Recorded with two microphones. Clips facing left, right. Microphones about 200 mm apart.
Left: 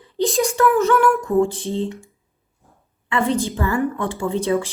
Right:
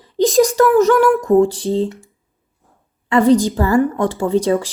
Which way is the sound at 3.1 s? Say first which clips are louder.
Right 8 dB; 40° right (ahead or behind).